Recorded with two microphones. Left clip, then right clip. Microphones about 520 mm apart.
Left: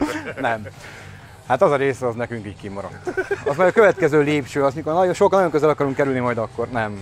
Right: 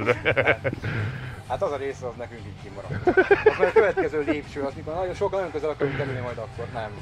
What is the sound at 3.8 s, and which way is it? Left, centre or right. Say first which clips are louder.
Speech: left 8 dB; left.